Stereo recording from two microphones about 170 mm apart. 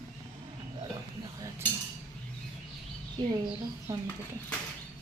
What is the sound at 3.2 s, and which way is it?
Speech, 25° right (ahead or behind).